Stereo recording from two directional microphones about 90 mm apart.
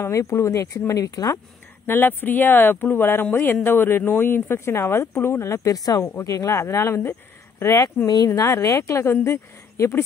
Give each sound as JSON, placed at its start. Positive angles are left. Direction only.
{"t": 0.0, "sound": "speech", "side_deg": 35}
{"t": 1.9, "sound": "speech", "side_deg": 25}